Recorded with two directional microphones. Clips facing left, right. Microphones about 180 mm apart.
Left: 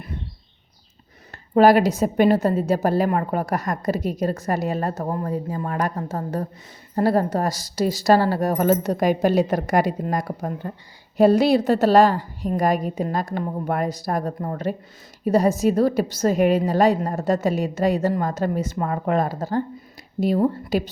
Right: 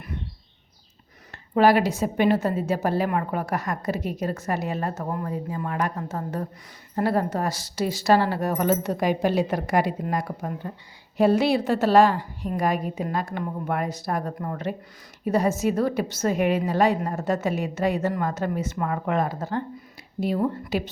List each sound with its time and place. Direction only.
1.5 s a woman's voice: 40° left (ahead or behind)